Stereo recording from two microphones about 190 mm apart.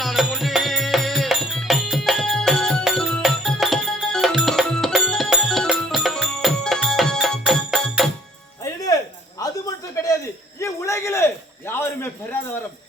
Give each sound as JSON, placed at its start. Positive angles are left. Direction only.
{"t": 0.0, "sound": "music", "side_deg": 0}
{"t": 8.6, "sound": "music", "side_deg": 20}
{"t": 9.4, "sound": "a sound", "side_deg": 20}